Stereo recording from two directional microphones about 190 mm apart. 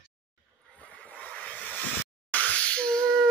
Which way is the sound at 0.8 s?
10° left (ahead or behind).